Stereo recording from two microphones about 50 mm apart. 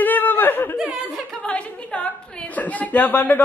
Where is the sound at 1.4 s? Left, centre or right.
Left.